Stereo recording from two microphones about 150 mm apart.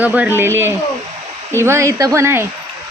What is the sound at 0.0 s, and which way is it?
Speech, 10° right (ahead or behind).